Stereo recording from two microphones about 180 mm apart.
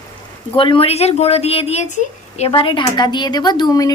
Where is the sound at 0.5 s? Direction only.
30° left (ahead or behind).